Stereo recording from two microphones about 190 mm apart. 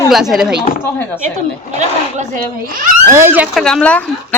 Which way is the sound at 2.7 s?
45° right (ahead or behind).